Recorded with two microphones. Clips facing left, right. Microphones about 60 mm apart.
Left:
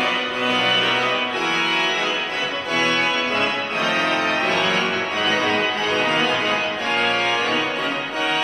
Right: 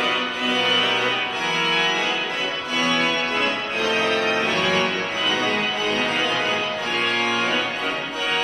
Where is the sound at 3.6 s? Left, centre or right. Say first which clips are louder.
Left 1 dB; left.